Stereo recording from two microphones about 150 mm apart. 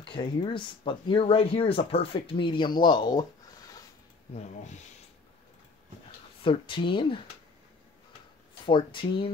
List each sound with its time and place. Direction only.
0.0 s speech: 35° left (ahead or behind)
6.4 s speech: 35° left (ahead or behind)
8.6 s speech: 35° left (ahead or behind)